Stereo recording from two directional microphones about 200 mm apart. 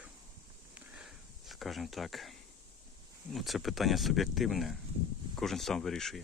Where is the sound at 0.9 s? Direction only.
Centre (ahead or behind).